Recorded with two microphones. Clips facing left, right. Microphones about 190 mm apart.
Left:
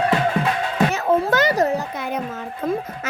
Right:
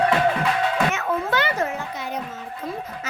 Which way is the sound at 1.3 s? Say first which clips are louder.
Left 5 dB; 40° left (ahead or behind).